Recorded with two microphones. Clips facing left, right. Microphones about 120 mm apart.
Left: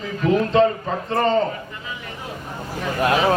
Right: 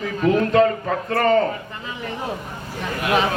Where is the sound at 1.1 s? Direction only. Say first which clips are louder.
Right 1 dB; 25° left (ahead or behind).